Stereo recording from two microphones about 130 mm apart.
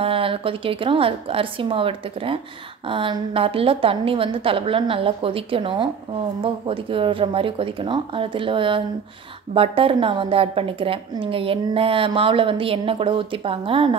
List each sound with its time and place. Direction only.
0.0 s a woman's voice: 45° right (ahead or behind)